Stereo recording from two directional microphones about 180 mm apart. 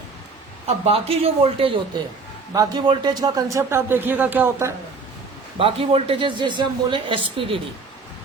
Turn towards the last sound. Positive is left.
turn(degrees=-30)  # may be behind; listen again after turning